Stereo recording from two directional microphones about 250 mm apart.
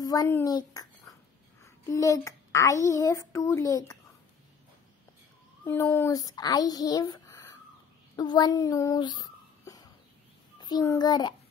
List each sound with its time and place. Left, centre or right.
0.0 s a child's voice: centre
5.7 s a child's voice: centre